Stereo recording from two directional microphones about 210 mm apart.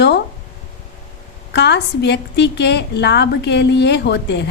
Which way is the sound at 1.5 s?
55° left (ahead or behind).